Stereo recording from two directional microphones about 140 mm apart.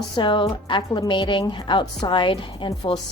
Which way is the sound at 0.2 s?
35° left (ahead or behind).